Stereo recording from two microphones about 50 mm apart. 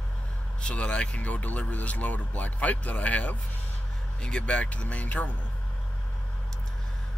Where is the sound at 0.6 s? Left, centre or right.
Left.